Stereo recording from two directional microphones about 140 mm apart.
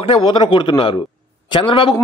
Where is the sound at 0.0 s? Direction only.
40° left (ahead or behind).